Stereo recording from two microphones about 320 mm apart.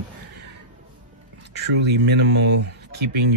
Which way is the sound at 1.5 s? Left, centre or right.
Right.